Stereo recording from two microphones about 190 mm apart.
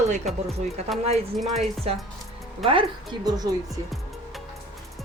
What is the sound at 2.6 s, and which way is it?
Speech, 25° right (ahead or behind).